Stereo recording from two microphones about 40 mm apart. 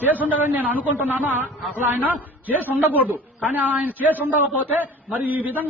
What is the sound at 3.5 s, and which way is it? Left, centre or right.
A man's voice, right.